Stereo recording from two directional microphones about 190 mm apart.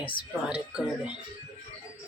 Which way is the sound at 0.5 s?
5° right (ahead or behind).